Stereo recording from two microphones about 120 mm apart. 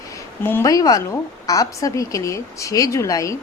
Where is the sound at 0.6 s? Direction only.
30° left (ahead or behind).